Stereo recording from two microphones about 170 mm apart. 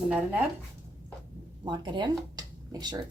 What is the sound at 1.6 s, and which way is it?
Speech, 25° right (ahead or behind).